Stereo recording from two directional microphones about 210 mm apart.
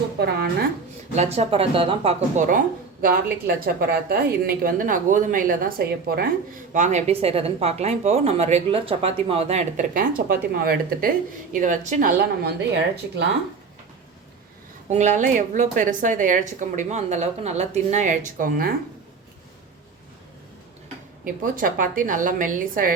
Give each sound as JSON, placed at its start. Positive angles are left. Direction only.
{"t": 0.2, "sound": "a woman's voice", "side_deg": -50}
{"t": 1.1, "sound": "a woman's voice", "side_deg": -30}
{"t": 14.8, "sound": "a woman's voice", "side_deg": -35}
{"t": 21.4, "sound": "a woman's voice", "side_deg": -40}